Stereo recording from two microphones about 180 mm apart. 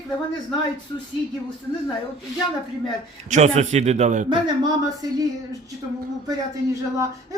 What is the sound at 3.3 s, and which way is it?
Speech, 40° right (ahead or behind).